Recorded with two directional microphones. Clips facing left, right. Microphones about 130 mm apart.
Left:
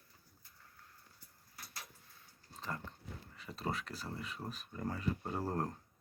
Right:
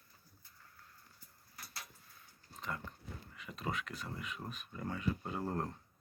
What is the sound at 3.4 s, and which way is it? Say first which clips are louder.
Speech: left 1 dB; 35° left (ahead or behind).